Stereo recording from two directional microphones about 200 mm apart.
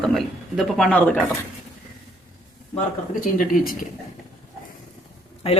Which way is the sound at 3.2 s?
45° left (ahead or behind).